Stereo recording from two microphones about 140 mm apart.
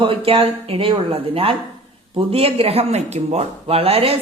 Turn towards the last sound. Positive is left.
turn(degrees=-45)  # may be behind; listen again after turning